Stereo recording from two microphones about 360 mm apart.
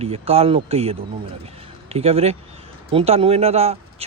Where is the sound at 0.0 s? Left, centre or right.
Centre.